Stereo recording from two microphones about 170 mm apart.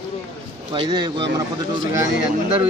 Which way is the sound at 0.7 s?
25° right (ahead or behind).